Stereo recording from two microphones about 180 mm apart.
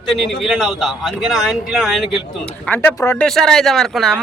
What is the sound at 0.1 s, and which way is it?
Speech, centre (ahead or behind).